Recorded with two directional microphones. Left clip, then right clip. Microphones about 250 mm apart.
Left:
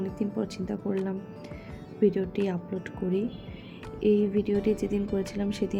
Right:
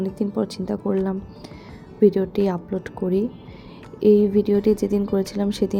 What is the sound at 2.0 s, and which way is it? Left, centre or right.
Speech, right.